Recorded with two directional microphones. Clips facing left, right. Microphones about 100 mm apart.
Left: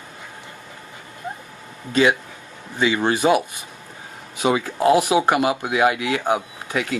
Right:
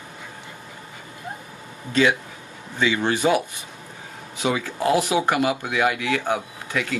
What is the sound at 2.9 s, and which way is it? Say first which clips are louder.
Speech: left 2 dB; 35° left (ahead or behind).